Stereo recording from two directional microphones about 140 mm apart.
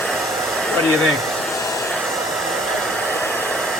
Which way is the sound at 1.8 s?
Centre (ahead or behind).